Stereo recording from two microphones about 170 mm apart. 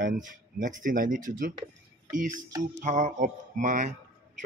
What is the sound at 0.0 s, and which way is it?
Speech, 50° right (ahead or behind).